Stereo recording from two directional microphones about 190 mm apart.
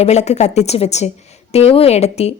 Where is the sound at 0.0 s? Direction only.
35° left (ahead or behind).